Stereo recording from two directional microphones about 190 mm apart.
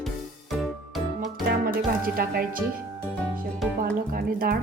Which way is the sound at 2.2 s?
50° right (ahead or behind).